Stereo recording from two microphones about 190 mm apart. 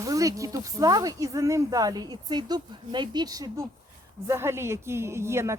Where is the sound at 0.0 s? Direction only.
15° right (ahead or behind).